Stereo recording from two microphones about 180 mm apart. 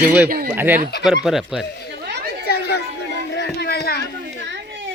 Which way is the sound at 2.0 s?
70° right (ahead or behind).